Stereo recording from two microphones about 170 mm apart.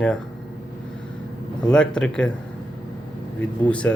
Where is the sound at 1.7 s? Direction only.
5° left (ahead or behind).